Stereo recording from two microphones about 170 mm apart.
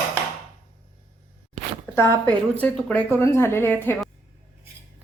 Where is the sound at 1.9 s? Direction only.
10° left (ahead or behind).